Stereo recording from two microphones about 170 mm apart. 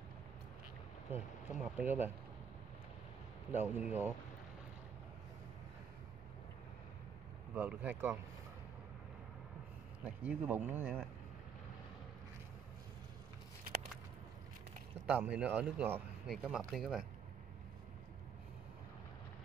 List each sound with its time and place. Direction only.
1.1 s speech: 10° right (ahead or behind)
3.5 s speech: 10° right (ahead or behind)
7.5 s speech: 10° right (ahead or behind)
10.0 s speech: 10° right (ahead or behind)
15.0 s speech: 5° right (ahead or behind)